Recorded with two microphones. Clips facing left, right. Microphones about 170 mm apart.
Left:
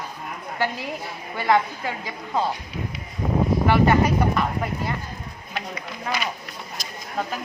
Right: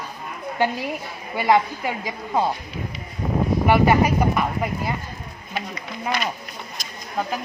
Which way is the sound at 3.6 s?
10° right (ahead or behind).